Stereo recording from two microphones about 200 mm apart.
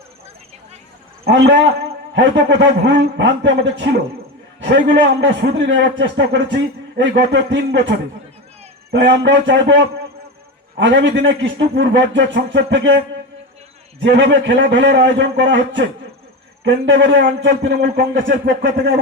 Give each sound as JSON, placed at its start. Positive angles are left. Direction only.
{"t": 2.1, "sound": "a man's voice", "side_deg": -60}
{"t": 14.0, "sound": "a man's voice", "side_deg": -60}